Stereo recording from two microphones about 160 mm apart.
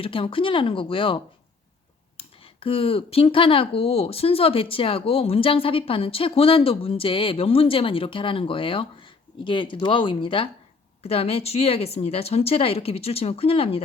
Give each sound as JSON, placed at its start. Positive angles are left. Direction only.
{"t": 0.0, "sound": "speech", "side_deg": 35}